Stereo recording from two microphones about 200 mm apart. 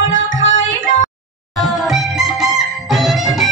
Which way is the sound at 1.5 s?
Centre (ahead or behind).